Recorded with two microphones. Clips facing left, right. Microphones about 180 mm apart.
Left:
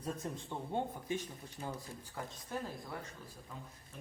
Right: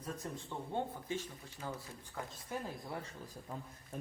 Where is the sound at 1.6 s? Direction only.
30° left (ahead or behind).